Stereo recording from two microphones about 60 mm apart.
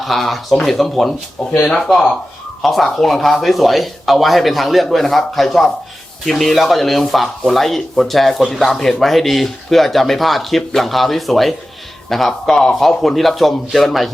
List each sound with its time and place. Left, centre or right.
0.0 s speech: centre